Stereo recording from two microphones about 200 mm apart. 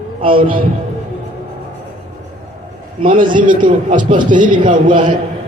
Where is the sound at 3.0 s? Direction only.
40° right (ahead or behind).